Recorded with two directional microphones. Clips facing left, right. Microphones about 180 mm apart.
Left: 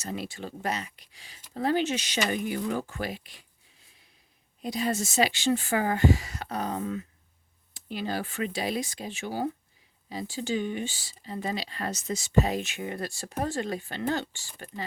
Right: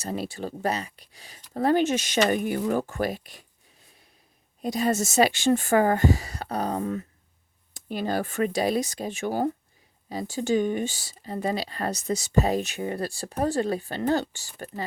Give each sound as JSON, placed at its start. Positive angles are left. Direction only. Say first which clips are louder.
{"t": 0.0, "sound": "speech", "louder": "right 4 dB", "side_deg": -35}
{"t": 4.6, "sound": "speech", "louder": "right 4 dB", "side_deg": -45}